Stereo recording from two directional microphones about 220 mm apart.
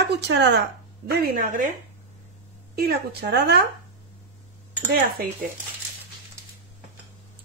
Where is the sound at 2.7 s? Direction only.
45° right (ahead or behind).